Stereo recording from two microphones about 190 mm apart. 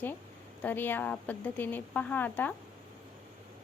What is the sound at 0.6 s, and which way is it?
A woman's voice, 10° left (ahead or behind).